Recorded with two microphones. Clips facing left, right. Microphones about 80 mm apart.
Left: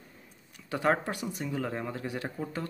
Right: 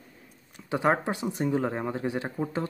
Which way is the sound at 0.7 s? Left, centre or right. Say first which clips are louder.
Right 3 dB; right.